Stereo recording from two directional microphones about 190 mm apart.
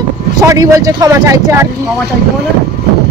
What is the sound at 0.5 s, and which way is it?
Speech, 15° right (ahead or behind).